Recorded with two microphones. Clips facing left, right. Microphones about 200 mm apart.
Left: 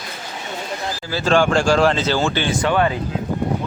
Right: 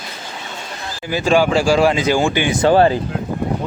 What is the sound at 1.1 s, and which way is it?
Speech, 10° right (ahead or behind).